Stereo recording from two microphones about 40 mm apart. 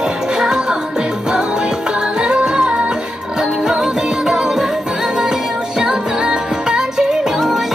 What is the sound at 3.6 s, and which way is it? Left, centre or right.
Music, centre.